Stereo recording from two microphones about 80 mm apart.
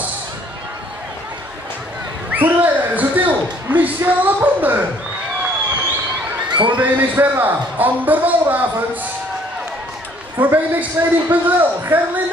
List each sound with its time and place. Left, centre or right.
2.3 s a sound: right
6.5 s speech: right
6.8 s speech: right
10.4 s speech: right